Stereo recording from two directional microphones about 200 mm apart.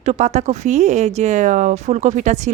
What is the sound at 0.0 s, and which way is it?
Speech, 35° right (ahead or behind).